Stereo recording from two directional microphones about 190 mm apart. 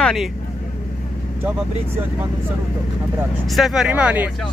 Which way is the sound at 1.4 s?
10° right (ahead or behind).